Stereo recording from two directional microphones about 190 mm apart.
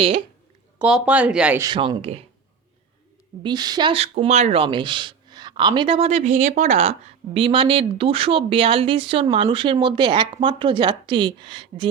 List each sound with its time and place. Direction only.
0.8 s speech: 5° right (ahead or behind)
1.6 s speech: 20° right (ahead or behind)
3.4 s speech: 20° right (ahead or behind)